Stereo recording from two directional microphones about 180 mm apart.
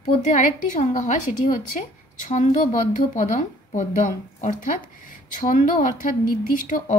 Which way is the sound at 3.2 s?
45° left (ahead or behind).